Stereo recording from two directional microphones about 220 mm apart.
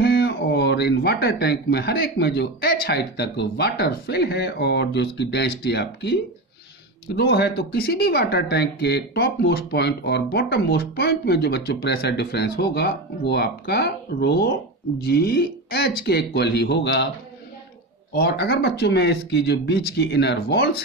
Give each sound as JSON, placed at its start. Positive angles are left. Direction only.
{"t": 0.0, "sound": "speech", "side_deg": 50}
{"t": 7.2, "sound": "speech", "side_deg": 50}
{"t": 18.1, "sound": "speech", "side_deg": 50}